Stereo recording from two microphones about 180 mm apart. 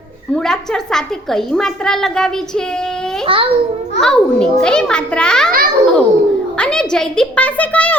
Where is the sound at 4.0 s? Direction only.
5° left (ahead or behind).